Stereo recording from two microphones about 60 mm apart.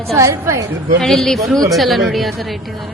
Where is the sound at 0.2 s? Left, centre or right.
Right.